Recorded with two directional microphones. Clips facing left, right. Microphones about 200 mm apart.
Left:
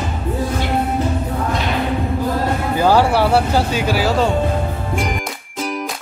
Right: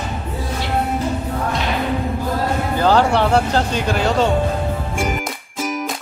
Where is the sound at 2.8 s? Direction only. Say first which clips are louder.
Left 1 dB; 10° left (ahead or behind).